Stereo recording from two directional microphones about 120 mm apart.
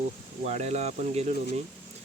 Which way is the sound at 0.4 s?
65° right (ahead or behind).